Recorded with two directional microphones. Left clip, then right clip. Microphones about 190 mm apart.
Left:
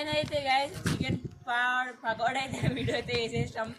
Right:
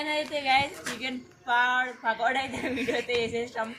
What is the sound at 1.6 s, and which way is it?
Speech, 25° left (ahead or behind).